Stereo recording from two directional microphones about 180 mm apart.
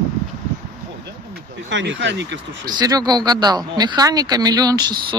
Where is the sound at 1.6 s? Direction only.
90° right; by 2.4 s 70° right (ahead or behind).